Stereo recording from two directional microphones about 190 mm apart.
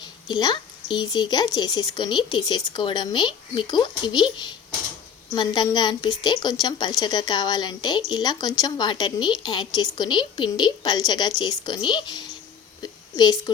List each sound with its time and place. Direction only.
0.0 s a woman's voice: 20° left (ahead or behind)
5.3 s a woman's voice: 20° left (ahead or behind)
12.8 s a sound: 20° left (ahead or behind)